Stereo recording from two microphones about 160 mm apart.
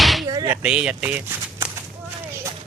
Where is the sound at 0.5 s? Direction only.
5° right (ahead or behind).